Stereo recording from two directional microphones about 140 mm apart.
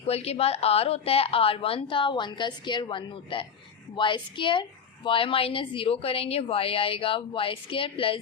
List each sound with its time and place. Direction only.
0.0 s a woman's voice: 45° left (ahead or behind)